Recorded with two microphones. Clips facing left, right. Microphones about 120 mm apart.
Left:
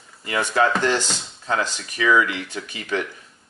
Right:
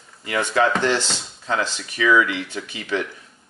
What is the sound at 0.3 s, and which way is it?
Speech, 10° left (ahead or behind).